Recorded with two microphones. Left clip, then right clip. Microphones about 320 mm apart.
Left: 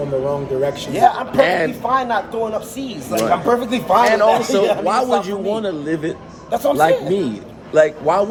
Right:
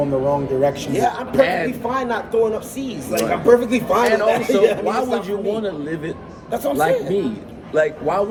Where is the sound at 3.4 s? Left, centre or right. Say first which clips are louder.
Right 2 dB; centre.